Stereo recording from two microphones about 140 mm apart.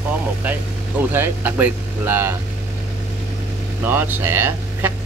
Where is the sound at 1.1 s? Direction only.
15° right (ahead or behind).